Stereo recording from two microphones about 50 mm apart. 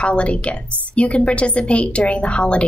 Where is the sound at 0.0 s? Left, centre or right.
Left.